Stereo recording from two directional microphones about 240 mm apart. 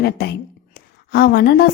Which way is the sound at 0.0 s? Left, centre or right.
Left.